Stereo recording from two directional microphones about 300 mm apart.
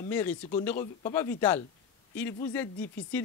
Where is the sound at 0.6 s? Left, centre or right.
Centre.